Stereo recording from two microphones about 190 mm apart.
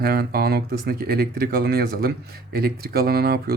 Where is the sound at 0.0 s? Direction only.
55° right (ahead or behind).